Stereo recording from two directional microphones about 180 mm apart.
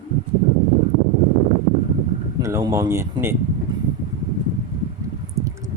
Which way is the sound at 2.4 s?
15° right (ahead or behind).